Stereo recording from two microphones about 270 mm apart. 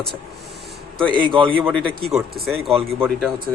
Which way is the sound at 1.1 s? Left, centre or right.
Centre.